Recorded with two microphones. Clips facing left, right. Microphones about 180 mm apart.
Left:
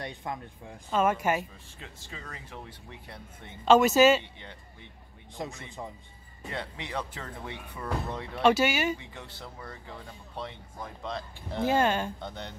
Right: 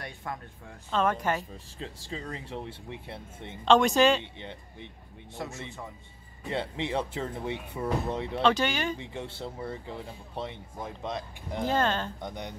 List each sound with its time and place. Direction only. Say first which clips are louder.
0.0 s speech: left 2 dB; 20° left (ahead or behind)
1.8 s speech: right 7 dB; 30° right (ahead or behind)
3.6 s speech: left 2 dB; 5° left (ahead or behind)
4.2 s speech: right 5 dB; 20° right (ahead or behind)
5.4 s speech: left 1 dB; 20° left (ahead or behind)
6.5 s speech: right 6 dB; 25° right (ahead or behind)
8.4 s speech: left 3 dB; 10° left (ahead or behind)
9.1 s speech: right 7 dB; 25° right (ahead or behind)
11.6 s speech: left 2 dB; 10° left (ahead or behind)
12.2 s speech: right 2 dB; 15° right (ahead or behind)